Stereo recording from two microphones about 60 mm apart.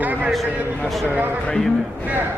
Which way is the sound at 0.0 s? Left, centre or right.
Right.